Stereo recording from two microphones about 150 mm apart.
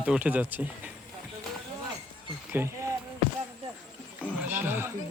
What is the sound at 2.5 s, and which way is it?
Speech, 15° right (ahead or behind).